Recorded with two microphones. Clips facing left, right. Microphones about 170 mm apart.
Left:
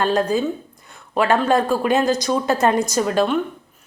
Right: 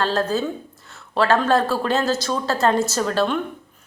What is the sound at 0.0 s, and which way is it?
A woman's voice, 15° left (ahead or behind).